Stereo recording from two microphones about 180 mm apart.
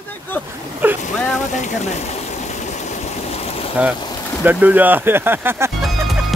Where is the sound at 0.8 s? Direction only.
10° right (ahead or behind).